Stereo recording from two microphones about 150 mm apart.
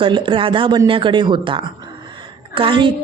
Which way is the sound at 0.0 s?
35° right (ahead or behind).